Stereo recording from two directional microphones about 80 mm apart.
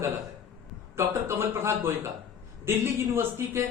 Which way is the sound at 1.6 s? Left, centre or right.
Right.